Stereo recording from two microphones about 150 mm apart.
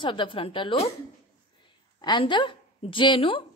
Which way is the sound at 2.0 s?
30° left (ahead or behind).